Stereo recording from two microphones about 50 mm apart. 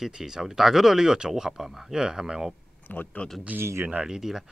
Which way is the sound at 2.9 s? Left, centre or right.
Left.